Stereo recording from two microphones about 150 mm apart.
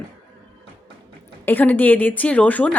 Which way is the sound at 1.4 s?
10° left (ahead or behind).